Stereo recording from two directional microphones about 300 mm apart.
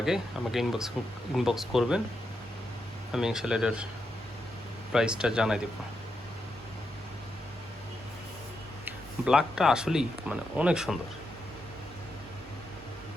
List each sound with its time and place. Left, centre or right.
0.0 s speech: centre
3.1 s speech: centre
4.9 s speech: centre
8.8 s speech: centre